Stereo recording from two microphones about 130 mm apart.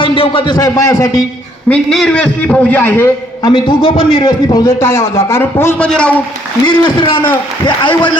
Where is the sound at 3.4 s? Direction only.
35° left (ahead or behind); by 6.2 s 10° left (ahead or behind).